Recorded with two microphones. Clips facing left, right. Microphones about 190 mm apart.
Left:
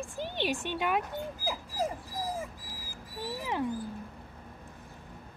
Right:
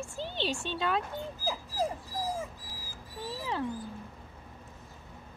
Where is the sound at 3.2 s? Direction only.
15° left (ahead or behind).